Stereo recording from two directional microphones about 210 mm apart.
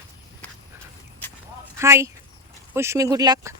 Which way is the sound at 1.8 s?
15° right (ahead or behind).